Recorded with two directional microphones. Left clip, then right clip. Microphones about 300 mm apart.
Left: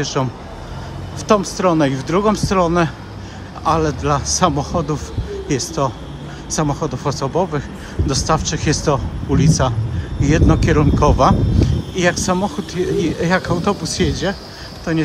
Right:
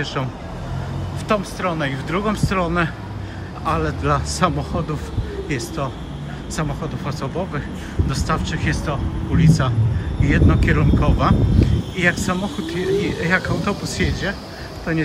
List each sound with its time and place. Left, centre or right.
0.0 s speech: centre